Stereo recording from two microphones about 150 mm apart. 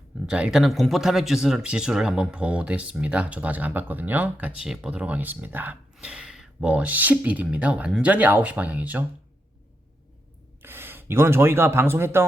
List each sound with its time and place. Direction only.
0.3 s speech: 5° right (ahead or behind)
10.6 s speech: 15° right (ahead or behind)